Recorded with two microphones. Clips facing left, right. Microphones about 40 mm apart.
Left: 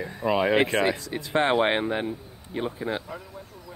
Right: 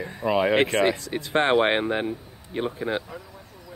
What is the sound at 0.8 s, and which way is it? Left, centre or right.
Speech, right.